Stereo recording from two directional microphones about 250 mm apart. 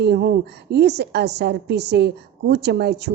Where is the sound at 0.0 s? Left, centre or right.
Right.